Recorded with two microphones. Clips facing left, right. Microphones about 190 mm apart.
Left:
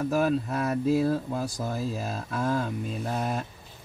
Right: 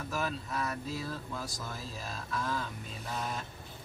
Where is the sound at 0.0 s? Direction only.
50° left (ahead or behind).